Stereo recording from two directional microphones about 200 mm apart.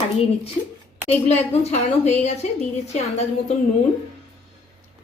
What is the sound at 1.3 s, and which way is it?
A woman's voice, 35° left (ahead or behind).